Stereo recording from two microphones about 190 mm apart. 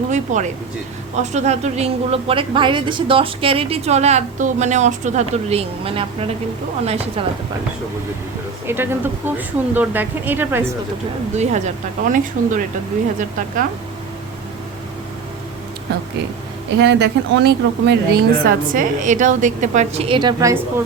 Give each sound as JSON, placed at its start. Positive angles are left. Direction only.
{"t": 0.1, "sound": "a woman's voice", "side_deg": -40}
{"t": 8.6, "sound": "a woman's voice", "side_deg": -10}
{"t": 11.3, "sound": "a woman's voice", "side_deg": -40}
{"t": 16.7, "sound": "a woman's voice", "side_deg": -65}